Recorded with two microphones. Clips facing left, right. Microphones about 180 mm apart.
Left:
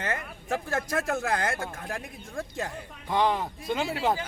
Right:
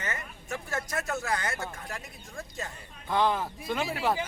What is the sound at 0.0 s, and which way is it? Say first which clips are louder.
Speech: left 5 dB; 60° left (ahead or behind).